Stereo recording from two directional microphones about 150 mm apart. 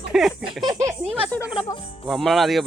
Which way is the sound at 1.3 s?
10° left (ahead or behind).